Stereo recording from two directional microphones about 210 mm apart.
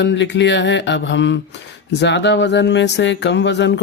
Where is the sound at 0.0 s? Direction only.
55° left (ahead or behind).